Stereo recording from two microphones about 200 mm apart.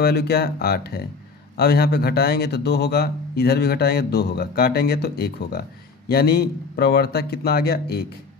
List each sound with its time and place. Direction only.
0.0 s speech: 55° left (ahead or behind)